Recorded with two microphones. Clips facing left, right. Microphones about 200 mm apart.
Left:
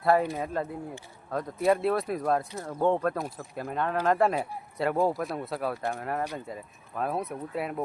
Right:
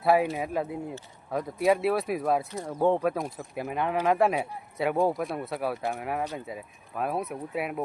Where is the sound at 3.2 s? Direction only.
Centre (ahead or behind).